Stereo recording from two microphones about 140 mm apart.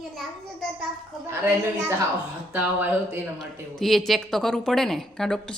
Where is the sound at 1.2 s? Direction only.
20° right (ahead or behind).